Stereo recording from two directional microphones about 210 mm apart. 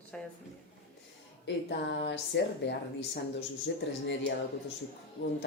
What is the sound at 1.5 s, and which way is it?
A woman's voice, 55° left (ahead or behind).